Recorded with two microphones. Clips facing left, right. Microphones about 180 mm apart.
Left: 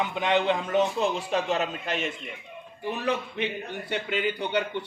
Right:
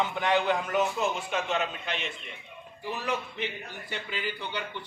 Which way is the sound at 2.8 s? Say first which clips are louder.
Left 4 dB; 60° left (ahead or behind).